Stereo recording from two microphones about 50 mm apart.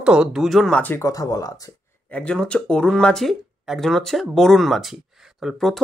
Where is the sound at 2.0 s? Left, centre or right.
Left.